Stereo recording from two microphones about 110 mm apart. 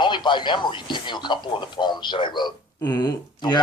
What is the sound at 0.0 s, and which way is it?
A man's voice, 45° left (ahead or behind).